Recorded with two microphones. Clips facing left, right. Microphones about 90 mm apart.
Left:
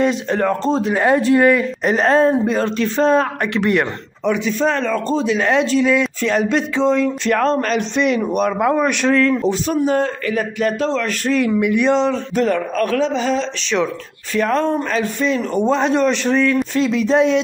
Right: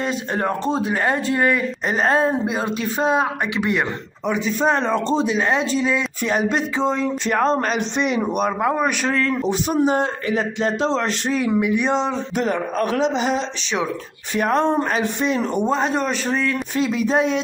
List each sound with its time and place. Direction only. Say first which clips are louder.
0.0 s a man's voice: left 5 dB; 5° right (ahead or behind)
0.9 s a man's voice: left 6 dB; 5° left (ahead or behind)
4.6 s a man's voice: right 1 dB; 20° right (ahead or behind); by 9.4 s 5° right (ahead or behind)
9.4 s speech: left 1 dB; 15° right (ahead or behind)
11.6 s speech: left 4 dB; 5° right (ahead or behind)